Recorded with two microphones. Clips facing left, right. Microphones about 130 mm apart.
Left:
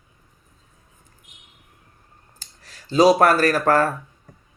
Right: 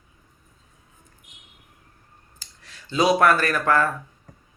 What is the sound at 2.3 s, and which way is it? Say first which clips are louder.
Speech: even; 40° left (ahead or behind).